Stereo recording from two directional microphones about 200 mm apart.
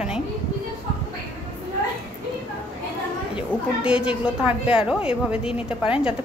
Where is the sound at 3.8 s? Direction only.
5° right (ahead or behind).